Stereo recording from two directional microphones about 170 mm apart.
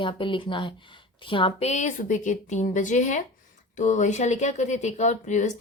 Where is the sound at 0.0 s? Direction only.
30° left (ahead or behind).